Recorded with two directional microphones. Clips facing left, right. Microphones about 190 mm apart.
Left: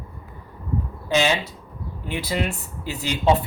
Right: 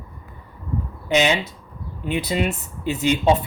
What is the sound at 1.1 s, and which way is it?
Speech, 20° right (ahead or behind).